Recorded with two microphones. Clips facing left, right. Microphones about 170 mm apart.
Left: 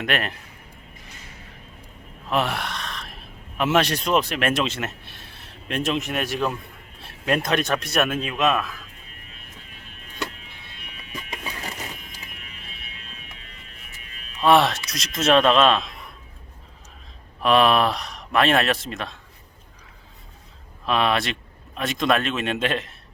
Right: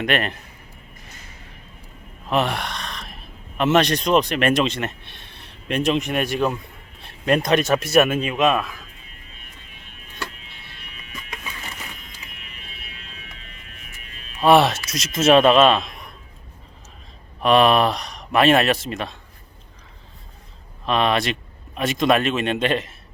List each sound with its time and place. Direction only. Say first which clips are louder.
0.0 s speech: right 3 dB; centre (ahead or behind)
2.3 s speech: right 2 dB; centre (ahead or behind)
11.3 s music: left 2 dB; 35° left (ahead or behind)
14.4 s speech: right 2 dB; centre (ahead or behind)
17.4 s speech: right 2 dB; centre (ahead or behind)
20.8 s speech: right 2 dB; centre (ahead or behind)